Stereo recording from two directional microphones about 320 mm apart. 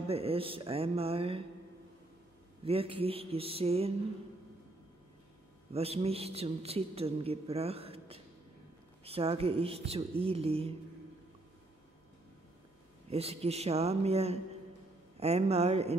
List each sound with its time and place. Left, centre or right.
0.1 s a woman's voice: centre
2.6 s a woman's voice: centre
5.7 s a man's voice: centre
13.1 s a man's voice: centre